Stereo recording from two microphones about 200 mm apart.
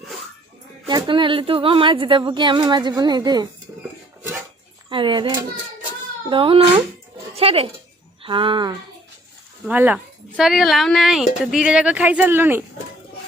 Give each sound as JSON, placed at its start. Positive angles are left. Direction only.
{"t": 0.9, "sound": "speech", "side_deg": -25}
{"t": 4.2, "sound": "a sound", "side_deg": -10}
{"t": 4.9, "sound": "speech", "side_deg": -25}
{"t": 9.6, "sound": "speech", "side_deg": -10}